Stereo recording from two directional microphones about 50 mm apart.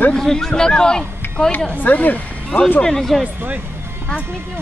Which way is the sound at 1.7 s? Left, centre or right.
Left.